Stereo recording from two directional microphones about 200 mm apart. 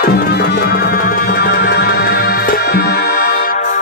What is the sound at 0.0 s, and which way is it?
Music, 50° left (ahead or behind).